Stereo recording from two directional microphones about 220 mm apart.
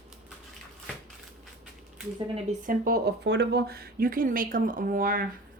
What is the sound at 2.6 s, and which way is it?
Speech, 40° right (ahead or behind).